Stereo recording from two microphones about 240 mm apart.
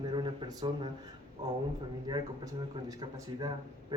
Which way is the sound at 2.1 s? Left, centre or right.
Centre.